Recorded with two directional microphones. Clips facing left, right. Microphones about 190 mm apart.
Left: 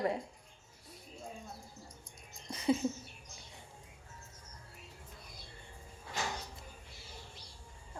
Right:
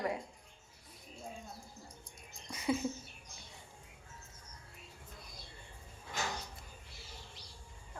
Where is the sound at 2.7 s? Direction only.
25° left (ahead or behind).